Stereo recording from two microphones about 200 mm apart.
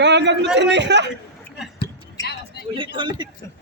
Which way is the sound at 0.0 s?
60° right (ahead or behind).